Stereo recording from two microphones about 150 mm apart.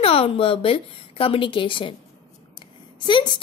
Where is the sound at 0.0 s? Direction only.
40° left (ahead or behind).